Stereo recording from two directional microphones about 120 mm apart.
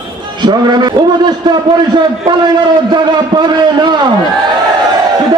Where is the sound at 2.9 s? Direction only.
40° right (ahead or behind).